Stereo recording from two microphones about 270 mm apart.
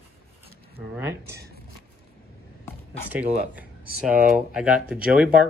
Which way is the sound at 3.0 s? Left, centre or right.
Centre.